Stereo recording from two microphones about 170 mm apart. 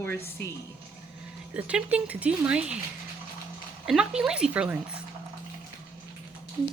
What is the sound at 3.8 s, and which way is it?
Speech, 5° right (ahead or behind).